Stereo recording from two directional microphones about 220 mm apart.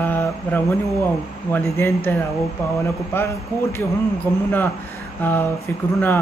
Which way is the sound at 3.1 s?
10° left (ahead or behind).